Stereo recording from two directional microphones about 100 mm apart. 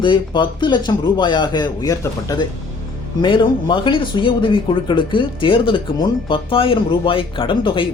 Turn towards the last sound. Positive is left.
turn(degrees=55)  # may be behind; listen again after turning